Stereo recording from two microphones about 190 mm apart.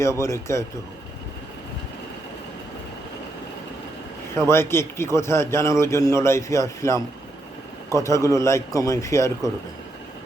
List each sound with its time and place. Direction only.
0.0 s a man's voice: 15° left (ahead or behind)
4.4 s a man's voice: 15° left (ahead or behind)